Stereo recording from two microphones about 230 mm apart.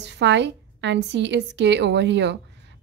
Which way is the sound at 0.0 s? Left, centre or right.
Right.